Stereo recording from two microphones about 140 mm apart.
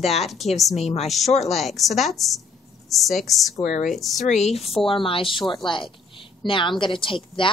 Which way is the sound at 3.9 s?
Centre (ahead or behind).